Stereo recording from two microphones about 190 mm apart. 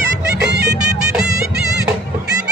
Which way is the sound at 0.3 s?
60° right (ahead or behind).